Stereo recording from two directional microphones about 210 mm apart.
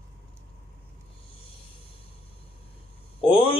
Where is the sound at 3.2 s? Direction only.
25° left (ahead or behind).